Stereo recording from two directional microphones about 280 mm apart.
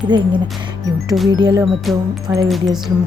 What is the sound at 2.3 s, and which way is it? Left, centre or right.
Speech, centre.